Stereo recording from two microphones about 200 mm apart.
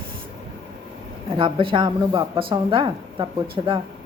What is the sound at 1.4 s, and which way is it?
A woman's voice, 25° right (ahead or behind).